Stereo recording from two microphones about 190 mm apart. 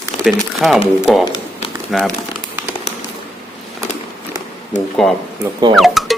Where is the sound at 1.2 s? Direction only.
30° left (ahead or behind).